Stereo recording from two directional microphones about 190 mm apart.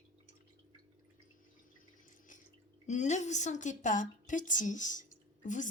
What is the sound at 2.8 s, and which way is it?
A woman's voice, 40° left (ahead or behind).